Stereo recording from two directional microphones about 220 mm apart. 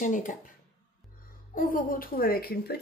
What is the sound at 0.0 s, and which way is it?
Speech, 35° left (ahead or behind).